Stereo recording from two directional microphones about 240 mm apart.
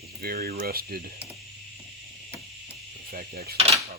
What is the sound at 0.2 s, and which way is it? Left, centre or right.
Speech, right.